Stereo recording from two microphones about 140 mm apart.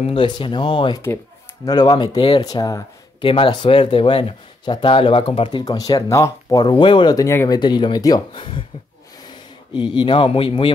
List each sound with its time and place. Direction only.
0.0 s speech: 40° left (ahead or behind)
3.3 s speech: 40° left (ahead or behind)
5.7 s speech: 25° left (ahead or behind)
9.9 s speech: 40° left (ahead or behind)